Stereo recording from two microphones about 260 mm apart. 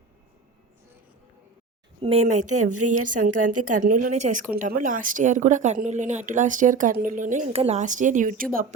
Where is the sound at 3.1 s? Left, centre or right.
Right.